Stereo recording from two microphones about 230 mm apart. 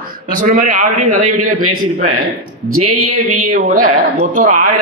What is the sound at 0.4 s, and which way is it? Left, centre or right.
A man's voice, right.